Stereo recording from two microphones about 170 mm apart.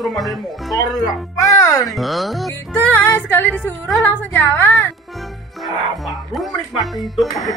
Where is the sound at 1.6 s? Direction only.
20° left (ahead or behind).